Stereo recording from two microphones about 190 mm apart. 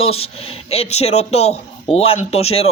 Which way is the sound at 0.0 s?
30° left (ahead or behind).